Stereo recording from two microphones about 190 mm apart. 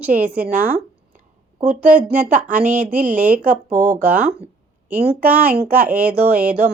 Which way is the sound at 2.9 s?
45° right (ahead or behind).